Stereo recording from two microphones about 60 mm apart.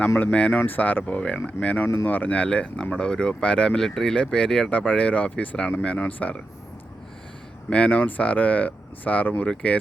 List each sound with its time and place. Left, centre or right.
0.2 s speech: left
4.7 s speech: left
7.7 s speech: left
9.5 s speech: centre